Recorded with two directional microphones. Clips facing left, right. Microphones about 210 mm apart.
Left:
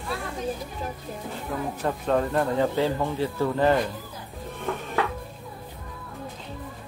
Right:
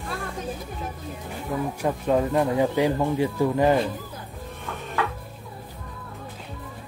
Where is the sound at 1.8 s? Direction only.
10° right (ahead or behind).